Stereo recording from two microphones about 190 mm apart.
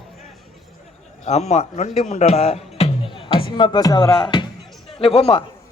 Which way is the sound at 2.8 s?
30° left (ahead or behind).